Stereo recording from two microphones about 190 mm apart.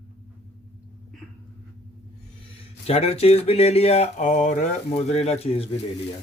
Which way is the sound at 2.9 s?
30° left (ahead or behind).